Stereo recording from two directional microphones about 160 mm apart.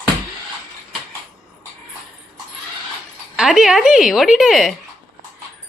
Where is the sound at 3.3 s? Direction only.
Centre (ahead or behind).